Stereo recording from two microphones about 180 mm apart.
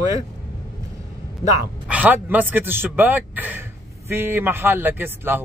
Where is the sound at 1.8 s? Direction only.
10° right (ahead or behind).